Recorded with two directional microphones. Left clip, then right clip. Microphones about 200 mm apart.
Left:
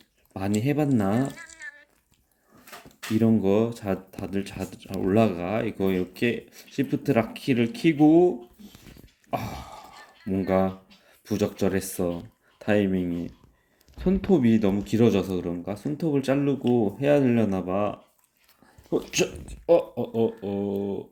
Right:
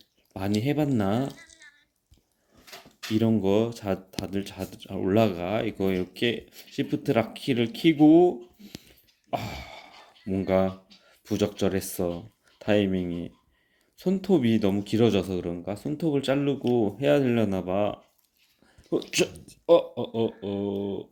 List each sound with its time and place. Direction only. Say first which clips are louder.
0.3 s speech: left 1 dB; 5° right (ahead or behind)
1.3 s coin: left 6 dB; 60° left (ahead or behind)
3.2 s speech: left 1 dB; centre (ahead or behind)
9.3 s a sound: left 1 dB; centre (ahead or behind)
10.2 s speech: even; centre (ahead or behind)
19.1 s speech: even; 10° right (ahead or behind)
20.0 s a sound: left 3 dB; 55° right (ahead or behind)